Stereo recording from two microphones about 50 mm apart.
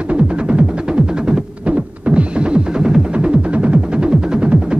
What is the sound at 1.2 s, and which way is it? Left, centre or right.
Music, right.